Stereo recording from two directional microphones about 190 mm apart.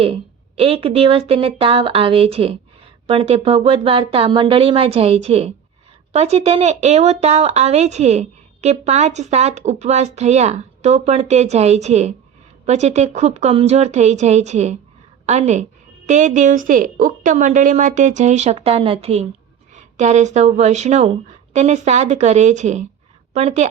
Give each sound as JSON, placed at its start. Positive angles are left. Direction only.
{"t": 0.0, "sound": "a woman's voice", "side_deg": -30}